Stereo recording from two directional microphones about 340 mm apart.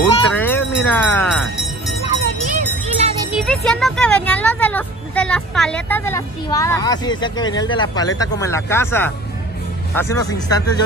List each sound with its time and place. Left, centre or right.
0.0 s music: centre
2.9 s jingle bell: centre
3.3 s speech: centre